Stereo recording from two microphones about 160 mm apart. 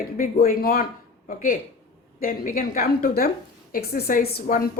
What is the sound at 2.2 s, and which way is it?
Speech, 60° left (ahead or behind).